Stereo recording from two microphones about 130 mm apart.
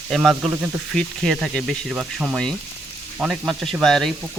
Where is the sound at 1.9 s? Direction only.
10° right (ahead or behind).